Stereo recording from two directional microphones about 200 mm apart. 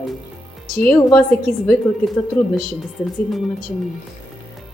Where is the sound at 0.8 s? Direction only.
5° left (ahead or behind).